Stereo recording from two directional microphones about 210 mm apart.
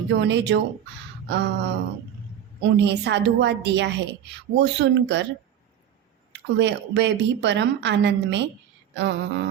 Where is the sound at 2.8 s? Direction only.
55° right (ahead or behind).